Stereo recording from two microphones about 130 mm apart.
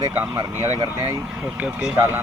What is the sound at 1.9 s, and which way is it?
Speech, 20° right (ahead or behind).